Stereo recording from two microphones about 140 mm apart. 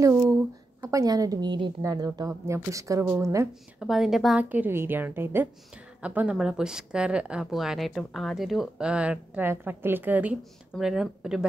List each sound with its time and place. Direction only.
0.0 s a woman's voice: 20° right (ahead or behind)
3.8 s a woman's voice: centre (ahead or behind)
4.5 s a woman's voice: 15° right (ahead or behind)